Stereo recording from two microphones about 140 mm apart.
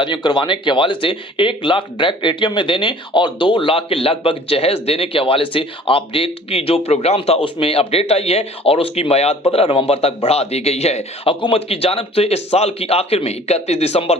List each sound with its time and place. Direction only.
0.0 s a man's voice: 30° left (ahead or behind); by 14.2 s 50° left (ahead or behind)